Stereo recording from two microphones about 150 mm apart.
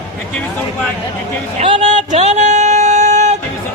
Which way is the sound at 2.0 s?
50° right (ahead or behind).